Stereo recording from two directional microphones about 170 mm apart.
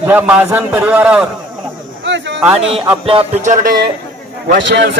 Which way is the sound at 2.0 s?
90° right.